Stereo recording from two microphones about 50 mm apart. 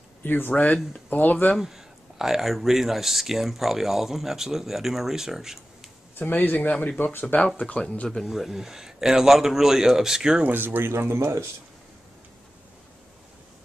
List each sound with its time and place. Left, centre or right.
0.2 s speech: left
0.5 s speech: left
1.6 s speech: centre
6.1 s speech: left
7.5 s speech: left
8.3 s speech: centre
10.4 s speech: right